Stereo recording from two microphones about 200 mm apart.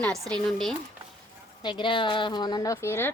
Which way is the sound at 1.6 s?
25° left (ahead or behind).